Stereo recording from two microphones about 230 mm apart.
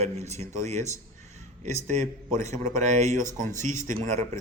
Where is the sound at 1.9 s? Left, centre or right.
Right.